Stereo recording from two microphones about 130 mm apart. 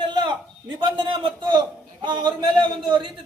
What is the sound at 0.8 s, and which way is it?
A man's voice, 40° right (ahead or behind).